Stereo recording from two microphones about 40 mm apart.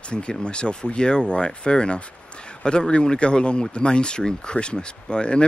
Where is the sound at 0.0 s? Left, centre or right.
Left.